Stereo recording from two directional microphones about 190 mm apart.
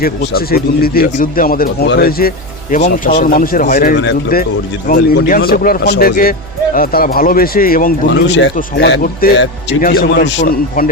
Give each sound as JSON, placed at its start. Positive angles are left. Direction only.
{"t": 0.0, "sound": "speech", "side_deg": 50}
{"t": 3.9, "sound": "speech", "side_deg": 65}
{"t": 8.1, "sound": "speech", "side_deg": 70}
{"t": 8.5, "sound": "speech", "side_deg": 60}